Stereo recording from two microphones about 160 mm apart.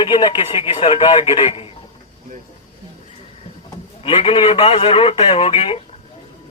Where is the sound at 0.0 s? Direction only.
30° left (ahead or behind).